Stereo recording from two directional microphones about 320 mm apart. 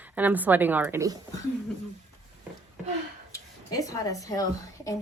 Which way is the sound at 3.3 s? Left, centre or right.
Centre.